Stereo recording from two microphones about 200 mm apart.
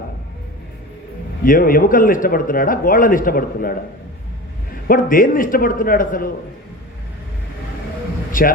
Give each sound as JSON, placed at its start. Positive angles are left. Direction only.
{"t": 1.5, "sound": "speech", "side_deg": 45}
{"t": 4.9, "sound": "speech", "side_deg": 45}
{"t": 8.3, "sound": "a man's voice", "side_deg": 45}